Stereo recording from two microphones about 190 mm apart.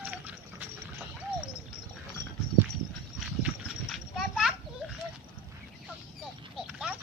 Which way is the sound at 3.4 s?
5° right (ahead or behind).